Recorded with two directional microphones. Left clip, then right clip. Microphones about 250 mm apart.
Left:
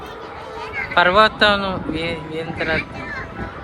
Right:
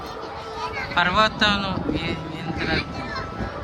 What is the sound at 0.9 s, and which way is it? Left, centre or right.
A man's voice, centre.